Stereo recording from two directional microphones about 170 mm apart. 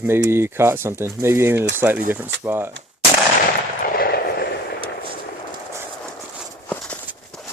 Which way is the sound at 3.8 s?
55° left (ahead or behind).